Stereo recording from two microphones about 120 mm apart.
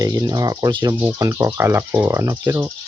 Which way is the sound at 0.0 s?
35° right (ahead or behind).